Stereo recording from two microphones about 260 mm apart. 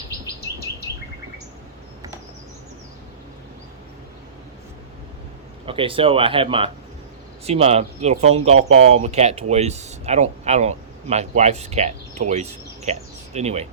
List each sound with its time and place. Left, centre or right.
5.6 s speech: right